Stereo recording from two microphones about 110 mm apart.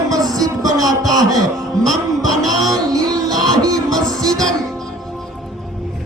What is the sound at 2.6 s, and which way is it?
Music, 35° right (ahead or behind).